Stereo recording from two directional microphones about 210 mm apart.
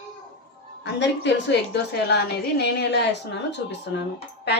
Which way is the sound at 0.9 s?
55° left (ahead or behind).